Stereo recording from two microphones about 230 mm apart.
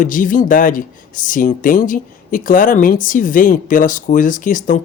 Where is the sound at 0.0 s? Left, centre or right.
Left.